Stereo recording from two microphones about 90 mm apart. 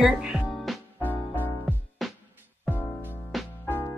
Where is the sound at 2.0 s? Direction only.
Centre (ahead or behind).